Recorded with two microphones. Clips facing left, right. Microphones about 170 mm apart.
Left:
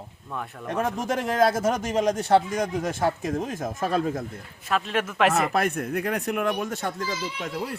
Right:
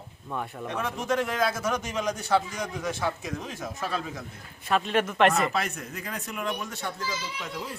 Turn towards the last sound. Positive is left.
turn(degrees=50)  # may be behind; listen again after turning